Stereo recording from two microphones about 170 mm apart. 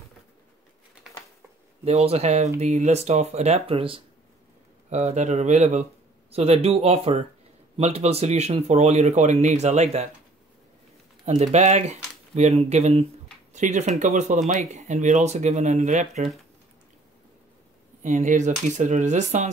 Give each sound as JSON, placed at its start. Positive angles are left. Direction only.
{"t": 1.9, "sound": "speech", "side_deg": -40}
{"t": 11.2, "sound": "speech", "side_deg": -40}
{"t": 18.0, "sound": "speech", "side_deg": -45}